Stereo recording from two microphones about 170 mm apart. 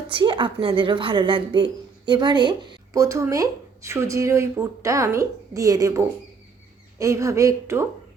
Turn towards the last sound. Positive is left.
turn(degrees=-15)  # may be behind; listen again after turning